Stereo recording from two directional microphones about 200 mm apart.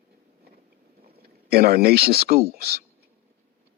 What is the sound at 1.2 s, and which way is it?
Speech, 50° right (ahead or behind).